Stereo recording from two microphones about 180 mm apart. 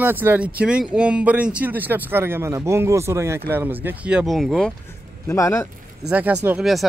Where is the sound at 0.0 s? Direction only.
10° right (ahead or behind).